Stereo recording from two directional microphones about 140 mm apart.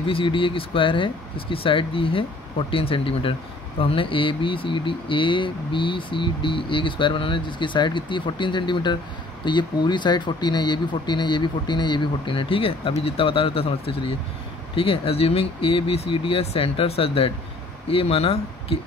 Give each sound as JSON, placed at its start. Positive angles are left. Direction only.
{"t": 0.0, "sound": "speech", "side_deg": 40}